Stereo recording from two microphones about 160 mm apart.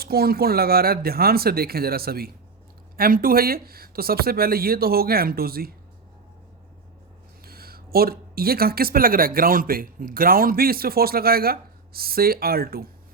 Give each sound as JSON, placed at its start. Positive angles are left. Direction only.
{"t": 0.0, "sound": "speech", "side_deg": -75}
{"t": 7.4, "sound": "speech", "side_deg": -70}